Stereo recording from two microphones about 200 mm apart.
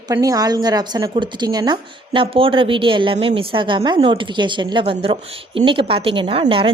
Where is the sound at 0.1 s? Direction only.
15° right (ahead or behind).